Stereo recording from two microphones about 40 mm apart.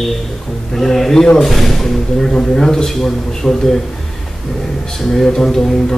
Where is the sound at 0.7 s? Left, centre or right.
Centre.